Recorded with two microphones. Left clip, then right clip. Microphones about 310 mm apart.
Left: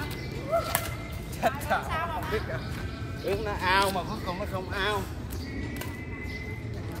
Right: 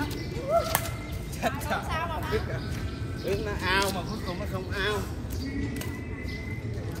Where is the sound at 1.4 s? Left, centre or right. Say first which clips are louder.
Left 3 dB; centre.